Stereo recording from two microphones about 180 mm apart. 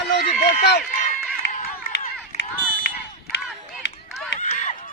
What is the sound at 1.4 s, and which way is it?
Run, 75° left (ahead or behind).